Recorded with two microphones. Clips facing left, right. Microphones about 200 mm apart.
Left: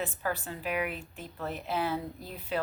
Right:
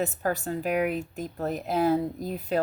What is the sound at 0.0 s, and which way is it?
Speech, 45° right (ahead or behind).